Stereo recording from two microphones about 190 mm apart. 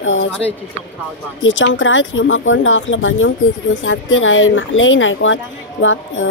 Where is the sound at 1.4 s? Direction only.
75° left (ahead or behind).